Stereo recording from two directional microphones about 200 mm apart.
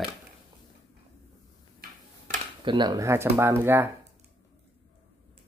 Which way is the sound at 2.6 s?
20° right (ahead or behind).